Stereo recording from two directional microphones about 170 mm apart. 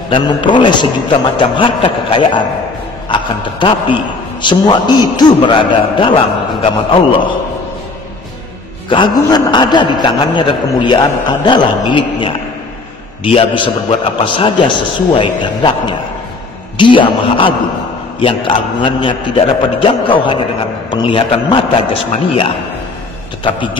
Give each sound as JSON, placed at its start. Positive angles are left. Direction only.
{"t": 0.1, "sound": "a man's voice", "side_deg": 30}
{"t": 8.8, "sound": "a man's voice", "side_deg": 30}
{"t": 23.4, "sound": "a man's voice", "side_deg": 30}